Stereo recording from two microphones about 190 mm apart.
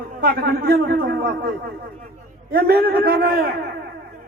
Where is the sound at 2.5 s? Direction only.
55° right (ahead or behind).